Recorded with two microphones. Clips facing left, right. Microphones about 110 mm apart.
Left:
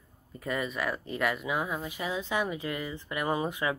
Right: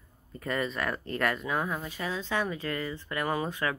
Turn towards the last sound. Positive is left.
turn(degrees=15)  # may be behind; listen again after turning